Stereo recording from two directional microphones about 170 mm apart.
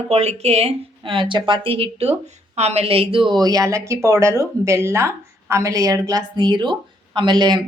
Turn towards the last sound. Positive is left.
turn(degrees=-25)  # may be behind; listen again after turning